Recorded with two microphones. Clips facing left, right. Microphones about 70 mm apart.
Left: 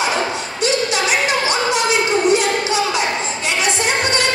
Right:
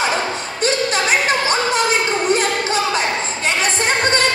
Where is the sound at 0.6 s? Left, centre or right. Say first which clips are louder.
Even; right.